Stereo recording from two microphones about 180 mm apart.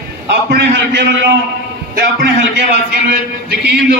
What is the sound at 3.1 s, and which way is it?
Speech, 60° right (ahead or behind).